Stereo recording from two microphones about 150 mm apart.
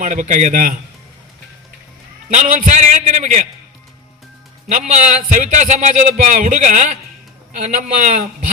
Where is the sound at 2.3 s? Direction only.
55° right (ahead or behind).